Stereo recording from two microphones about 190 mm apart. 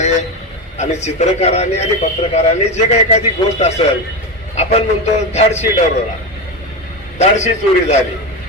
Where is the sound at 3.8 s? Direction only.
30° left (ahead or behind).